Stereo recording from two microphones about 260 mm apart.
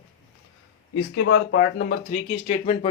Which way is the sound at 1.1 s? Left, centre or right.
Left.